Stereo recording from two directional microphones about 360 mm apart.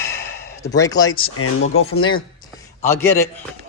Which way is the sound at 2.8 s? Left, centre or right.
Centre.